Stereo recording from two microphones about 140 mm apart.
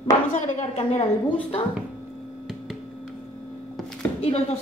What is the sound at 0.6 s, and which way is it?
Speech, 45° left (ahead or behind).